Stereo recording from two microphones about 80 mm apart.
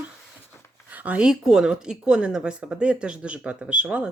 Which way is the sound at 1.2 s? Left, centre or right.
Centre.